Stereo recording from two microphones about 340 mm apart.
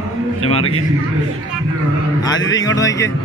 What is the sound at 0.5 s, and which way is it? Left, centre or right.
Speech, centre.